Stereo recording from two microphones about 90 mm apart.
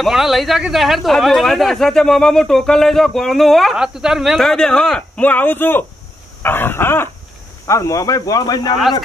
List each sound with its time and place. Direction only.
0.0 s speech: centre (ahead or behind)
5.2 s speech: 20° left (ahead or behind)
7.6 s speech: 35° left (ahead or behind)